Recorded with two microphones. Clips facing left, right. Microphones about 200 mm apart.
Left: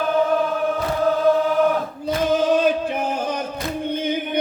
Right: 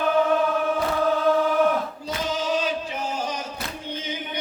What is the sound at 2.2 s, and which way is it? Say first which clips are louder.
Choir: left 8 dB; 55° left (ahead or behind).